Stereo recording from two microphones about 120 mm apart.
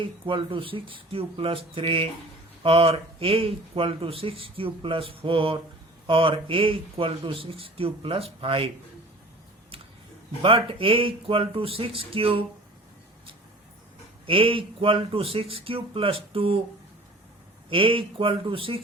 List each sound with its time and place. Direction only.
0.0 s speech: 40° right (ahead or behind)
10.4 s speech: 50° right (ahead or behind)
14.3 s speech: 50° right (ahead or behind)
17.7 s speech: 45° right (ahead or behind)